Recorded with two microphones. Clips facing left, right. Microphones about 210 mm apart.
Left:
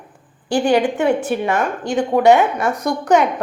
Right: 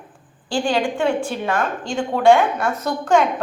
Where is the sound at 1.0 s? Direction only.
20° left (ahead or behind).